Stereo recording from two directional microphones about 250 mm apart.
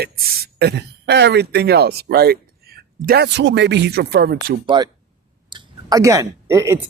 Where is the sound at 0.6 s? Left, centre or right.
Right.